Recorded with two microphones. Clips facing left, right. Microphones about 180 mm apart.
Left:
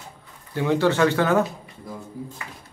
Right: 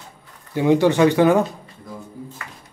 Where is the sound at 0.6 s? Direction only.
15° right (ahead or behind).